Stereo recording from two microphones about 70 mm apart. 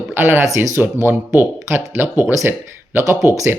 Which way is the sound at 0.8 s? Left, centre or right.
Right.